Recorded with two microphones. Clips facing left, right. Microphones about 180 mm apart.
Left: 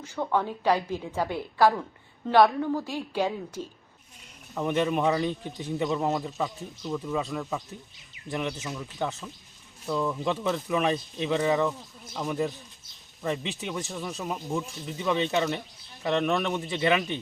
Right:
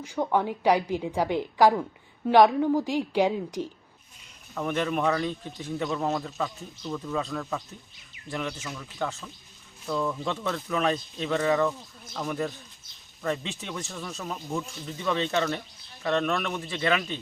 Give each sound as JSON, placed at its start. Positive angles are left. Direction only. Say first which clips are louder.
{"t": 0.0, "sound": "a woman's voice", "louder": "right 2 dB", "side_deg": -15}
{"t": 4.5, "sound": "speech", "louder": "left 2 dB", "side_deg": 20}
{"t": 8.3, "sound": "a man's voice", "louder": "left 2 dB", "side_deg": 20}